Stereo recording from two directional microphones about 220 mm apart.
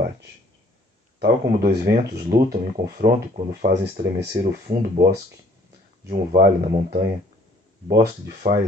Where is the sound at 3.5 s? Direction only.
45° right (ahead or behind).